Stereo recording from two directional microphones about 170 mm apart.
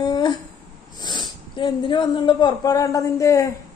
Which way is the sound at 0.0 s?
25° left (ahead or behind).